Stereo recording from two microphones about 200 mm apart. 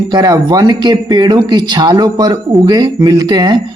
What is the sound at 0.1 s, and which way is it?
Speech, 20° right (ahead or behind).